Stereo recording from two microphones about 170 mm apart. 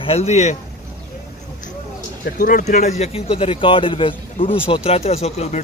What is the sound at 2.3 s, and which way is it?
Speech, 55° left (ahead or behind).